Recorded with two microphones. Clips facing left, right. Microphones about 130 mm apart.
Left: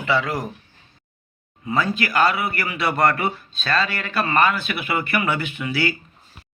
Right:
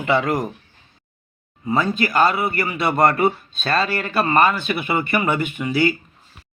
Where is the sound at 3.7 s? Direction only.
45° right (ahead or behind).